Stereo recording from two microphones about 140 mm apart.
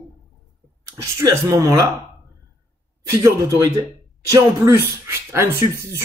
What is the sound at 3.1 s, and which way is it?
Speech, 20° right (ahead or behind).